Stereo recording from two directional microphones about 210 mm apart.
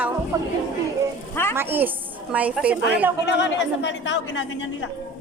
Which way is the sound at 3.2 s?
55° left (ahead or behind).